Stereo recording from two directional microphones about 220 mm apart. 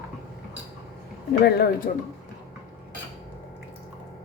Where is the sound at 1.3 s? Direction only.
45° left (ahead or behind).